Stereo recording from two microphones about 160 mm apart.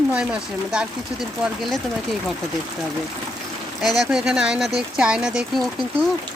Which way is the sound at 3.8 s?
Centre (ahead or behind).